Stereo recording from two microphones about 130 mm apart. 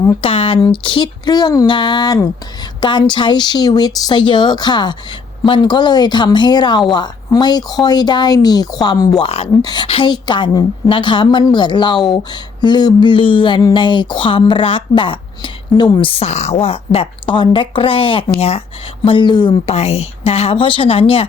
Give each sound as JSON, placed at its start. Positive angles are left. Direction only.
{"t": 0.2, "sound": "a woman's voice", "side_deg": 45}
{"t": 9.2, "sound": "speech", "side_deg": 50}
{"t": 9.6, "sound": "speech", "side_deg": 35}
{"t": 19.0, "sound": "speech", "side_deg": 40}
{"t": 19.6, "sound": "speech", "side_deg": 55}